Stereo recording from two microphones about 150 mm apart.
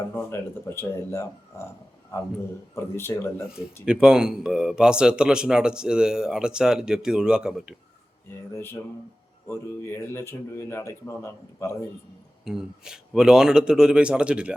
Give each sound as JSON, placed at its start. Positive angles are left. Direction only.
{"t": 0.1, "sound": "speech", "side_deg": 15}
{"t": 2.7, "sound": "speech", "side_deg": 15}
{"t": 3.8, "sound": "speech", "side_deg": -5}
{"t": 8.5, "sound": "speech", "side_deg": 15}
{"t": 12.5, "sound": "speech", "side_deg": -5}